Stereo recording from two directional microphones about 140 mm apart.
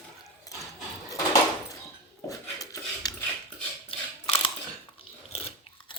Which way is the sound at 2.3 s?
25° left (ahead or behind).